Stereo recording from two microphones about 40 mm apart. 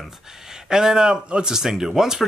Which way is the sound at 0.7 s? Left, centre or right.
Centre.